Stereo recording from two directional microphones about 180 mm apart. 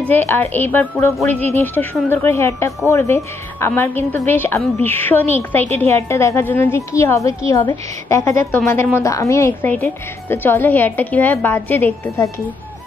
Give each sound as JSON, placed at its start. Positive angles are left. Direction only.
{"t": 0.1, "sound": "a woman's voice", "side_deg": 10}